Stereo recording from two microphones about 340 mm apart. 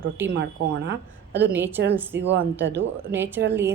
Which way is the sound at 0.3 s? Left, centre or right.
Right.